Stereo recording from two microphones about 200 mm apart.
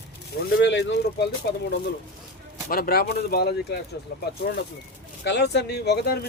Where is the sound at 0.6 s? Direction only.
65° left (ahead or behind).